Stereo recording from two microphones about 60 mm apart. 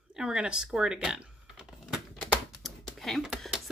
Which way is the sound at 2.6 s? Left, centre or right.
Centre.